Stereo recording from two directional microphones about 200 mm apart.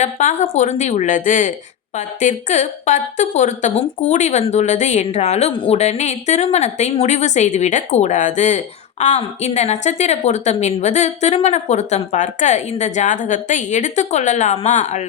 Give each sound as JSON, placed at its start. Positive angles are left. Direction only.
{"t": 0.0, "sound": "a woman's voice", "side_deg": 35}